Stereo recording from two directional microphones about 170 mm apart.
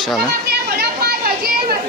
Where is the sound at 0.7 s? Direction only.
70° right (ahead or behind).